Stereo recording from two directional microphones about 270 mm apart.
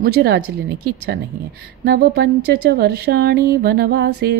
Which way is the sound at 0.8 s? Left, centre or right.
Right.